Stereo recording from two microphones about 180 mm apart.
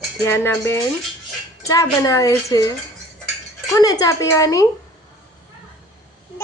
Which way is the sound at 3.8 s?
20° left (ahead or behind).